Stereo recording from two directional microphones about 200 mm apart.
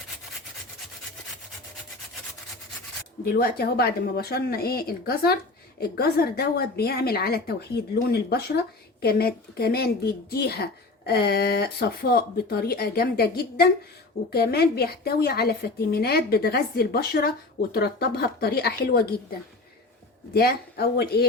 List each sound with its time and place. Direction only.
3.2 s a woman's voice: 50° left (ahead or behind)